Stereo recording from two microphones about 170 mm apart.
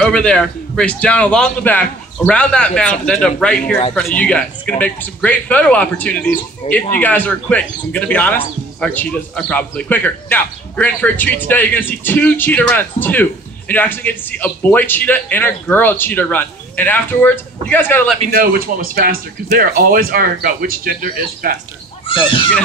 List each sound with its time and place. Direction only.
0.0 s a man's voice: 5° left (ahead or behind)
6.6 s speech: 35° left (ahead or behind)
7.0 s a man's voice: 10° left (ahead or behind)
18.4 s speech: 60° right (ahead or behind)
22.0 s speech: 30° left (ahead or behind)